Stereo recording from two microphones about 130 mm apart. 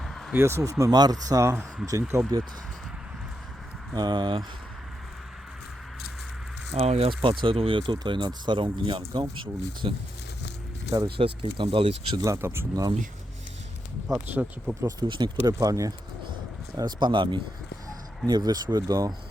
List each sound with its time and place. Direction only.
0.0 s a sound: centre (ahead or behind)
0.3 s speech: 20° right (ahead or behind)
3.9 s speech: 35° right (ahead or behind)
6.8 s speech: 55° right (ahead or behind)
7.1 s speech: 40° right (ahead or behind)
11.0 s speech: 40° right (ahead or behind)
12.2 s speech: 20° right (ahead or behind)
14.1 s speech: 10° right (ahead or behind)
14.8 s speech: 30° right (ahead or behind)